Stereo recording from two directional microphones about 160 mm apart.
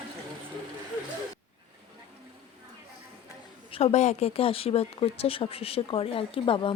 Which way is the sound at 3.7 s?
40° left (ahead or behind).